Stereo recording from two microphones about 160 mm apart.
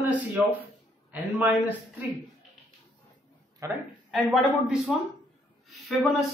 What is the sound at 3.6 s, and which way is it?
Speech, 20° right (ahead or behind).